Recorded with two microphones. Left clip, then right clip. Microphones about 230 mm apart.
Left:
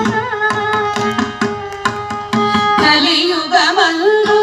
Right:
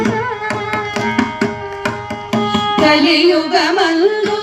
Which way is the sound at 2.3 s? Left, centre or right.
Right.